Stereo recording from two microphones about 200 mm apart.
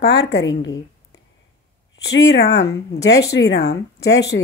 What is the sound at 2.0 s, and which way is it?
A woman's voice, 60° left (ahead or behind).